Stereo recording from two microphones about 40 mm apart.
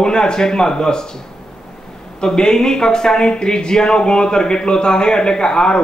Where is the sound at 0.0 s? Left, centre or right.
Centre.